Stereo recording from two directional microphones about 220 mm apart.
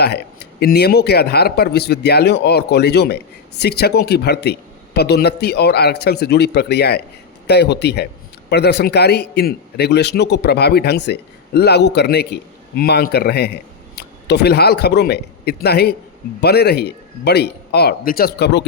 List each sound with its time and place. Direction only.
0.0 s a man's voice: 45° left (ahead or behind)